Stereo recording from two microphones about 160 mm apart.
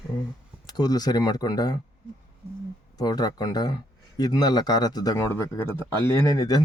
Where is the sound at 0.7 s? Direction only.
25° left (ahead or behind).